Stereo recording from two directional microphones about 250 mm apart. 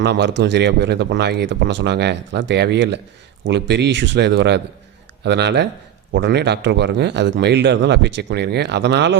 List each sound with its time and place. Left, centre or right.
0.0 s speech: right